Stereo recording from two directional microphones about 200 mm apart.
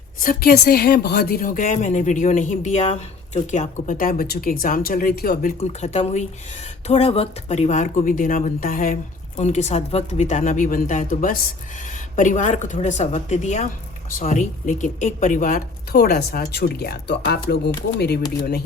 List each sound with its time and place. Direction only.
0.2 s a woman's voice: 45° left (ahead or behind)